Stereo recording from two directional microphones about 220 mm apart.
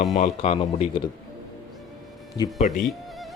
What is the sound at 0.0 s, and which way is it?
Speech, 30° left (ahead or behind).